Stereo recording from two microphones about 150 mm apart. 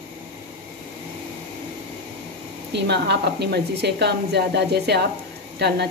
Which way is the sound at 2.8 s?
90° right.